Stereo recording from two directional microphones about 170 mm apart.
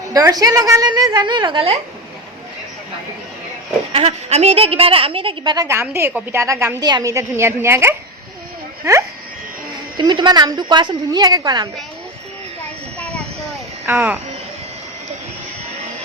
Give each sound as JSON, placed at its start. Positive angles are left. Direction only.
{"t": 0.1, "sound": "a woman's voice", "side_deg": -20}
{"t": 3.9, "sound": "a woman's voice", "side_deg": -40}
{"t": 13.0, "sound": "vehicle", "side_deg": 5}
{"t": 13.8, "sound": "a woman's voice", "side_deg": -10}